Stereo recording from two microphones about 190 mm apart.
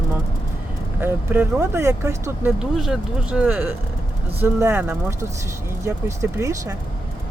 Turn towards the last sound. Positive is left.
turn(degrees=-15)  # may be behind; listen again after turning